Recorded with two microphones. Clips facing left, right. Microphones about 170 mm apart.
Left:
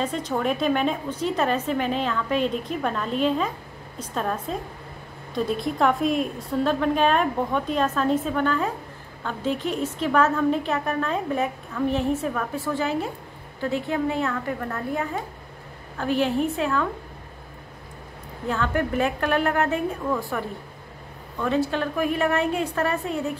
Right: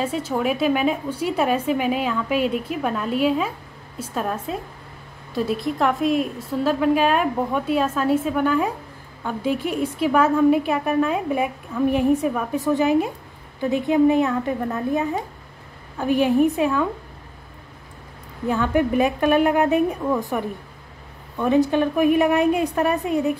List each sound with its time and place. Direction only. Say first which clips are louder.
0.0 s a woman's voice: right 2 dB; 5° right (ahead or behind)
18.5 s a woman's voice: right 5 dB; 15° right (ahead or behind)